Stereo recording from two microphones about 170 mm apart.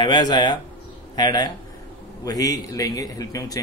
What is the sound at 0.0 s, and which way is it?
A man's voice, 25° left (ahead or behind).